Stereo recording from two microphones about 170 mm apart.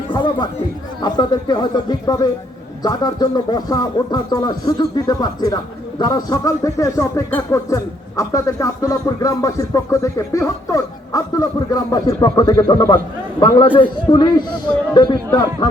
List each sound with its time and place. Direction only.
0.1 s chatter: 25° left (ahead or behind)
1.0 s speech: 25° left (ahead or behind)